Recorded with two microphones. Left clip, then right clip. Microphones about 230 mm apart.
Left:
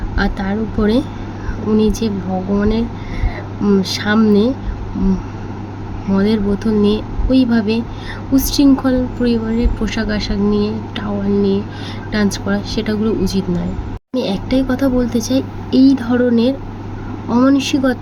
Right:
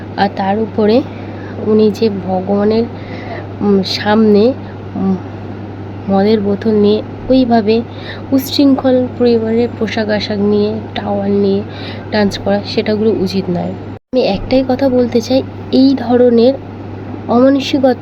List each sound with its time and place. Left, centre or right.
0.2 s speech: centre
6.1 s speech: centre